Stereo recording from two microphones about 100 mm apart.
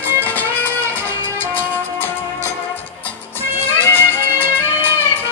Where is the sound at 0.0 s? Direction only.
20° left (ahead or behind).